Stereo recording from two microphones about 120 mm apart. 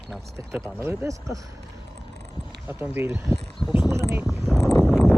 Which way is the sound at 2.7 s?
20° right (ahead or behind).